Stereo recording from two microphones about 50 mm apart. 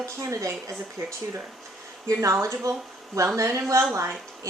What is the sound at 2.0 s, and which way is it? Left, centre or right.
Speech, right.